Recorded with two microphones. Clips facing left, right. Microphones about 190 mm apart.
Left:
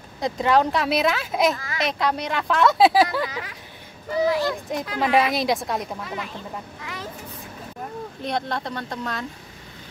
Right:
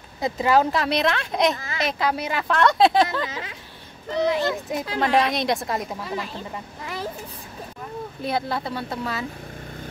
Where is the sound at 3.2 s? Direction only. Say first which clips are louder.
Even; 25° right (ahead or behind).